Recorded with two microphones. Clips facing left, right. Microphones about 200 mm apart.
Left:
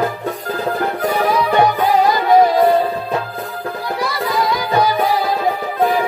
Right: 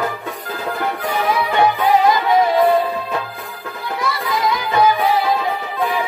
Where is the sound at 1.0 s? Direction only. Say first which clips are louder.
Left 3 dB; 45° left (ahead or behind).